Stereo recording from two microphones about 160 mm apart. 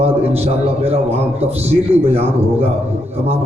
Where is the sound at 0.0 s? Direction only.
40° right (ahead or behind).